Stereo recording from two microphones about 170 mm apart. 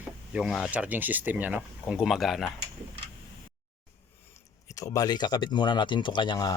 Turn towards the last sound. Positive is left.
turn(degrees=25)  # may be behind; listen again after turning